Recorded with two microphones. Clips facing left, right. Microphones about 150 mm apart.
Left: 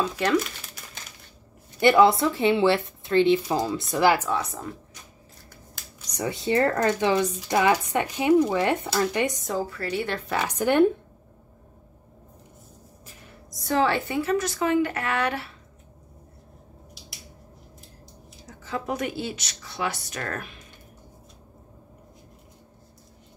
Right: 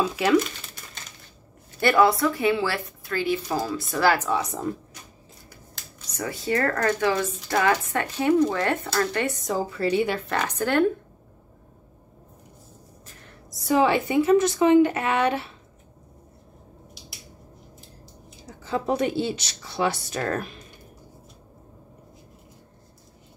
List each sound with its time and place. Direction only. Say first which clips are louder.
0.0 s speech: right 3 dB; 5° right (ahead or behind)
1.8 s a woman's voice: left 2 dB; 20° left (ahead or behind)
6.1 s speech: left 2 dB; 20° left (ahead or behind)
9.6 s a woman's voice: right 6 dB; 20° right (ahead or behind)
10.0 s speech: right 1 dB; centre (ahead or behind); by 10.9 s 15° left (ahead or behind)
13.6 s a woman's voice: right 3 dB; 10° right (ahead or behind)
18.6 s speech: right 5 dB; 30° right (ahead or behind)